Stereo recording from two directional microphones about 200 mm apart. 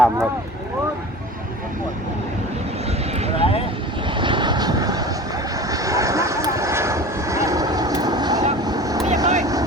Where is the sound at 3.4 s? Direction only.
30° left (ahead or behind).